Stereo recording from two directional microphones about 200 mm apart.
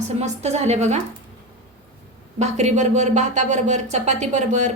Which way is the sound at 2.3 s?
35° right (ahead or behind).